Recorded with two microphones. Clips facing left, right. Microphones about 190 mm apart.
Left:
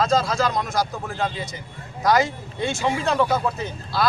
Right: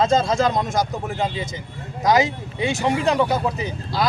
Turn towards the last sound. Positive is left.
turn(degrees=-15)  # may be behind; listen again after turning